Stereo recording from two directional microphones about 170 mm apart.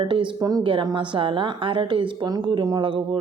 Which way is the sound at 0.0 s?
30° right (ahead or behind).